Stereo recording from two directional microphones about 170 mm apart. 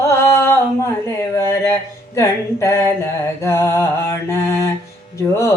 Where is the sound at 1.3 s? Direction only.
15° left (ahead or behind).